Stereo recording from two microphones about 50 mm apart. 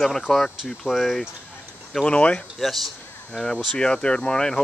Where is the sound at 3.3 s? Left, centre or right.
Centre.